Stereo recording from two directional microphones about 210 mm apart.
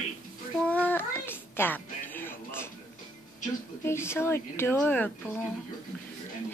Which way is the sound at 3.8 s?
10° left (ahead or behind).